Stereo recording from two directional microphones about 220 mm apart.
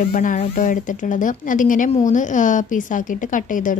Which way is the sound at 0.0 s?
40° left (ahead or behind).